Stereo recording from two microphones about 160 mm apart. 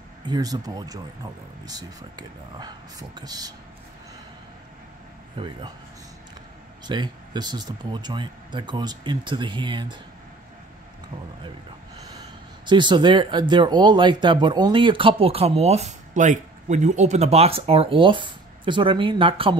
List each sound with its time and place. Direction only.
0.2 s speech: 25° right (ahead or behind)
5.4 s speech: 30° right (ahead or behind)
6.9 s speech: 25° right (ahead or behind)
12.6 s speech: 30° right (ahead or behind)